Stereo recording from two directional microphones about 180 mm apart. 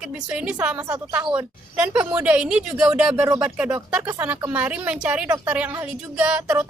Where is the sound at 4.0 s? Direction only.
20° right (ahead or behind).